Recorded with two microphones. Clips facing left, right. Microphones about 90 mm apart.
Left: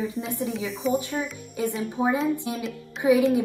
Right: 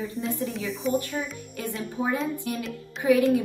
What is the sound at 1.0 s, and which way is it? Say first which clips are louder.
A woman's voice: left 1 dB; 15° left (ahead or behind).